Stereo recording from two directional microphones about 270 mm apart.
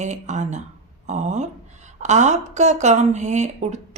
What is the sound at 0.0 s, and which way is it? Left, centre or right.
A woman's voice, right.